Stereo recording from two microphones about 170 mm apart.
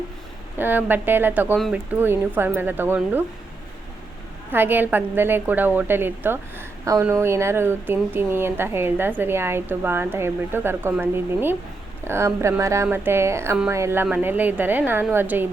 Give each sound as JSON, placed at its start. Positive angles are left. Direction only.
{"t": 0.6, "sound": "a woman's voice", "side_deg": -10}
{"t": 1.5, "sound": "speech", "side_deg": 0}
{"t": 2.0, "sound": "a woman's voice", "side_deg": -10}
{"t": 4.5, "sound": "a woman's voice", "side_deg": -10}